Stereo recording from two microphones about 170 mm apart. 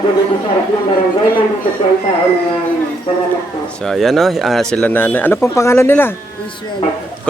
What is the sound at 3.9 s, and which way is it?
Speech, centre (ahead or behind).